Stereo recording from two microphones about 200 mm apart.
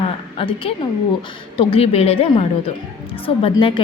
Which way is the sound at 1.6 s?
25° left (ahead or behind).